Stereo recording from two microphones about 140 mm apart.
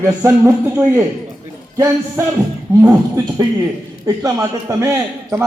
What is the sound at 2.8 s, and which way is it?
A man's voice, 25° right (ahead or behind).